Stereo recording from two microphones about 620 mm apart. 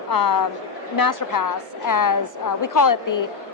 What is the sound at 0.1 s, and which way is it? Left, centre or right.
A woman's voice, left.